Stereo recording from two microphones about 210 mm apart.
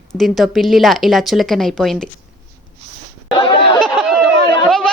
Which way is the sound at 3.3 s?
25° left (ahead or behind).